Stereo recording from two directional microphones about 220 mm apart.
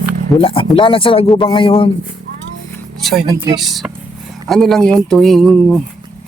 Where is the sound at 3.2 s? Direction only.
20° right (ahead or behind).